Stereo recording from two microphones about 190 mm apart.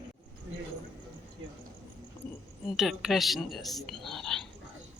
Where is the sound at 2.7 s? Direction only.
Centre (ahead or behind).